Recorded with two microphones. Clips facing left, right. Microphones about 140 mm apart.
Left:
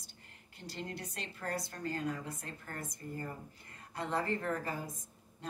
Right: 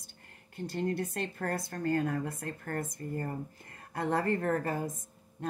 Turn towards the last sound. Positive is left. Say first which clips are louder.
# right 7 dB
turn(degrees=-50)  # may be behind; listen again after turning